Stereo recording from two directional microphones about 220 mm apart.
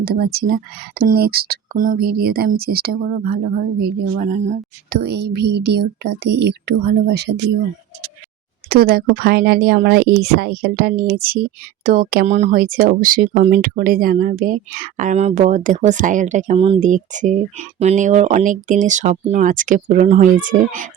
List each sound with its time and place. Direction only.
0.0 s speech: 45° right (ahead or behind)
4.9 s speech: 50° right (ahead or behind)
8.7 s speech: 40° right (ahead or behind)